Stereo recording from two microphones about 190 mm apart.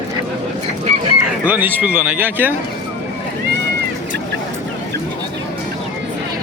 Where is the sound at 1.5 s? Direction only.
10° right (ahead or behind).